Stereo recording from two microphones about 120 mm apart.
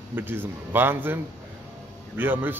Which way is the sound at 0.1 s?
15° right (ahead or behind).